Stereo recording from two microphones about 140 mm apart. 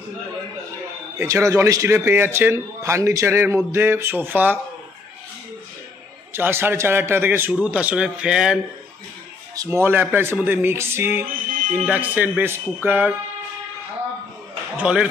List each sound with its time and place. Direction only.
1.1 s a man's voice: 20° right (ahead or behind)
6.3 s a man's voice: 15° right (ahead or behind)
9.6 s a man's voice: 20° right (ahead or behind)
14.8 s a man's voice: 5° right (ahead or behind)